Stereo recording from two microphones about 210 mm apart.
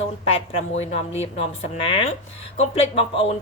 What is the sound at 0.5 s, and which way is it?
A woman's voice, 30° left (ahead or behind).